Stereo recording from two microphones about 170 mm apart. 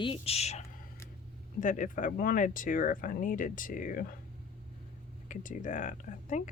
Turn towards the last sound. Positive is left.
turn(degrees=45)  # may be behind; listen again after turning